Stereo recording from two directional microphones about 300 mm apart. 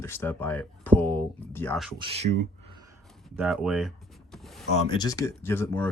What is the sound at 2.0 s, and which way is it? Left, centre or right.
Speech, centre.